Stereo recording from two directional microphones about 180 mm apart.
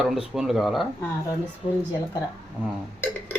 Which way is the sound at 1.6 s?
35° left (ahead or behind).